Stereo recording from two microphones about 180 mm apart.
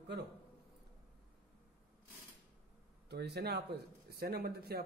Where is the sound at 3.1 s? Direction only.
65° right (ahead or behind).